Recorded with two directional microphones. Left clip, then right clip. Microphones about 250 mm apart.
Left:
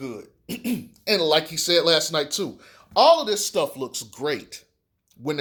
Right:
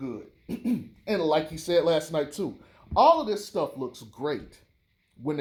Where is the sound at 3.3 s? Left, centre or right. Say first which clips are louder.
Left 5 dB; left.